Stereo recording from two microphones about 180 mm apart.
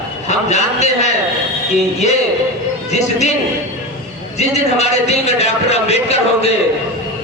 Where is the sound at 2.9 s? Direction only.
40° left (ahead or behind).